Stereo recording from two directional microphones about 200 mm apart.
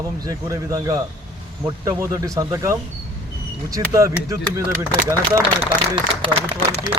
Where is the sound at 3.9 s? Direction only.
15° right (ahead or behind).